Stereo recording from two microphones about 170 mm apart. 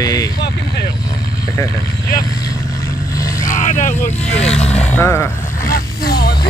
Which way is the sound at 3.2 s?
20° left (ahead or behind).